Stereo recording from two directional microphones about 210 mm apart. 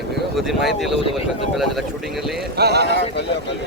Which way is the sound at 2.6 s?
50° right (ahead or behind).